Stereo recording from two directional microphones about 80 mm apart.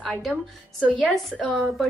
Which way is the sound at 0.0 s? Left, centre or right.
Centre.